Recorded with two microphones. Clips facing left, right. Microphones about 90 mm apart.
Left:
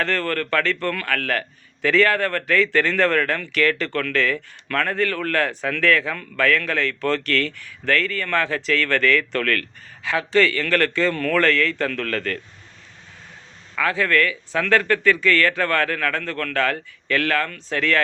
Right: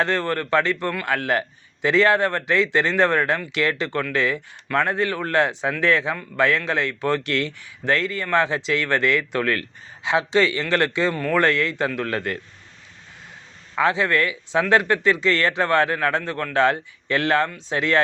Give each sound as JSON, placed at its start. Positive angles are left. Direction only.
{"t": 0.0, "sound": "speech", "side_deg": -20}
{"t": 13.7, "sound": "speech", "side_deg": -20}